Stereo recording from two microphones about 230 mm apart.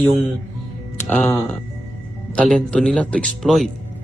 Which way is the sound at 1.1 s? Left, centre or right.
Centre.